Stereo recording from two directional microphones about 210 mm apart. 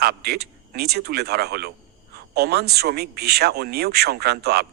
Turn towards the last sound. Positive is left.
turn(degrees=-50)  # may be behind; listen again after turning